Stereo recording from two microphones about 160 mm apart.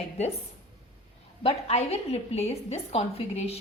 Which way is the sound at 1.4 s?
40° left (ahead or behind).